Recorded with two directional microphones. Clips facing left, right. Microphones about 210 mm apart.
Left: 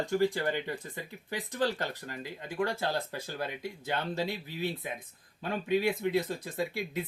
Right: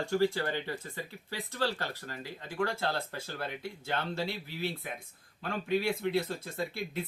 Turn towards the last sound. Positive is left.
turn(degrees=15)  # may be behind; listen again after turning